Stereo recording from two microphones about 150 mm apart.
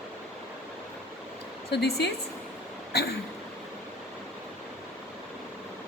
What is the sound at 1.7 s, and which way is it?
Speech, 90° left.